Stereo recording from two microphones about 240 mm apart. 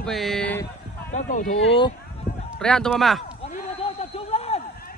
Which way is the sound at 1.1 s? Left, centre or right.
Left.